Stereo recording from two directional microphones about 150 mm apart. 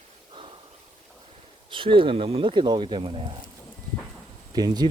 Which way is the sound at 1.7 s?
35° right (ahead or behind).